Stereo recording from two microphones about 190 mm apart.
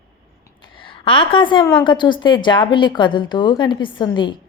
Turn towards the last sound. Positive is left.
turn(degrees=25)  # may be behind; listen again after turning